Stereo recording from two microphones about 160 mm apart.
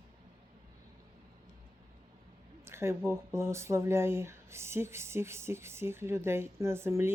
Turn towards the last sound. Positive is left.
turn(degrees=-15)  # may be behind; listen again after turning